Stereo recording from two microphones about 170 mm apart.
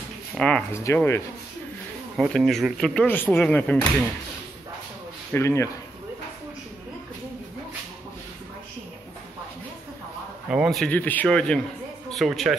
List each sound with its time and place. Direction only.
0.3 s speech: 5° left (ahead or behind)
0.7 s speech: 15° left (ahead or behind)
2.1 s speech: centre (ahead or behind)
5.3 s speech: 15° left (ahead or behind)
10.5 s speech: centre (ahead or behind)